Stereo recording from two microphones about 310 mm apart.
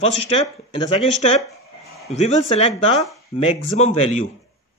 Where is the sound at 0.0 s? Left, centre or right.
Centre.